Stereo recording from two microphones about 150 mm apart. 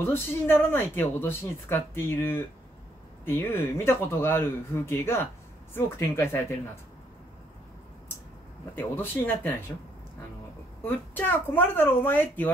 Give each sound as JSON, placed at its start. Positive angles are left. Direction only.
{"t": 0.0, "sound": "speech", "side_deg": 15}
{"t": 8.7, "sound": "speech", "side_deg": 15}
{"t": 10.8, "sound": "speech", "side_deg": 15}